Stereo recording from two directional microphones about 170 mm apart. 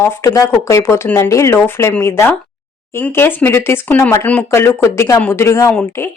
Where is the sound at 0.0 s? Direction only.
15° left (ahead or behind).